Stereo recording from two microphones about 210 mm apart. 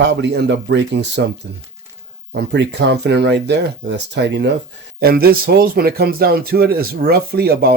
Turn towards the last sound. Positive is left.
turn(degrees=-50)  # may be behind; listen again after turning